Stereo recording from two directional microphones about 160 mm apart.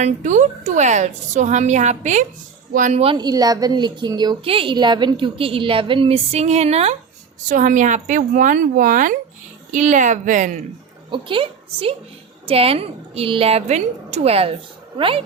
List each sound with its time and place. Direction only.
0.0 s a woman's voice: 50° right (ahead or behind)
3.0 s a woman's voice: 30° right (ahead or behind)
7.4 s a woman's voice: 55° right (ahead or behind)
11.1 s a woman's voice: 30° right (ahead or behind)